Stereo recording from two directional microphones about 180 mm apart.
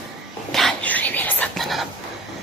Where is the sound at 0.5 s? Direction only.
5° left (ahead or behind).